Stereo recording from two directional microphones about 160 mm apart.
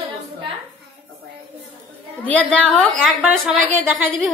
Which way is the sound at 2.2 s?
10° left (ahead or behind).